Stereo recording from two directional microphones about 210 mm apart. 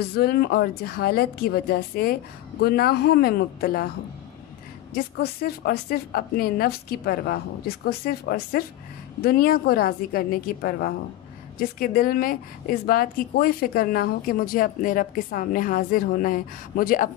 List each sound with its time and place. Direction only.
0.0 s a woman's voice: 50° left (ahead or behind)
4.9 s a woman's voice: 45° left (ahead or behind)